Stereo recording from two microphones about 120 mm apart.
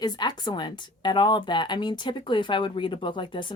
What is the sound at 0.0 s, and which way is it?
A woman's voice, 35° left (ahead or behind).